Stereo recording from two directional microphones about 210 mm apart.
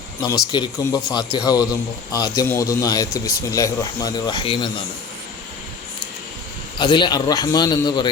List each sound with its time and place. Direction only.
0.2 s speech: 20° left (ahead or behind)
6.7 s a man's voice: 20° left (ahead or behind)